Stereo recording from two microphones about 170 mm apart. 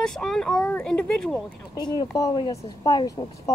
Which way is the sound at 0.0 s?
5° left (ahead or behind).